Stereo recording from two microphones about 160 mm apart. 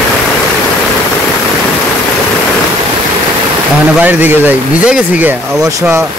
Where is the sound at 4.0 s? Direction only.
10° right (ahead or behind).